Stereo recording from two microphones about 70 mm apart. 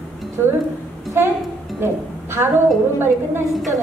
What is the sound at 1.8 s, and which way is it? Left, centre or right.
A woman's voice, right.